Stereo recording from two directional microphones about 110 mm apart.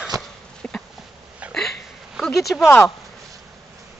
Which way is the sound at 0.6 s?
5° left (ahead or behind).